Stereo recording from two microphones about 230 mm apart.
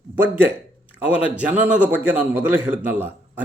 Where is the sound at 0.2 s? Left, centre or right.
Centre.